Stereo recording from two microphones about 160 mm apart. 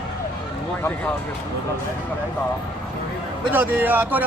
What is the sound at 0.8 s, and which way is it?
Speech, 10° left (ahead or behind).